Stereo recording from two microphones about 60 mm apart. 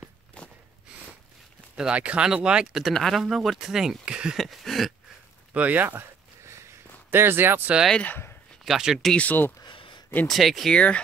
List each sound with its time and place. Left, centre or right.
0.4 s gasp: centre
0.9 s snort: centre
1.8 s speech: centre
2.9 s speech: centre
4.4 s speech: centre
5.5 s speech: right
7.1 s speech: right
8.6 s speech: centre
9.1 s speech: left
10.2 s speech: centre
10.7 s speech: centre